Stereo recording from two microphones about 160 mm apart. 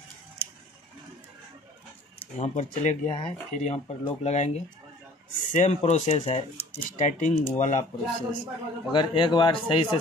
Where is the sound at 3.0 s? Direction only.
30° left (ahead or behind).